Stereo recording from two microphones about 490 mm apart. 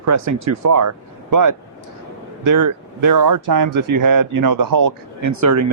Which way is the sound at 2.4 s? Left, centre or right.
Right.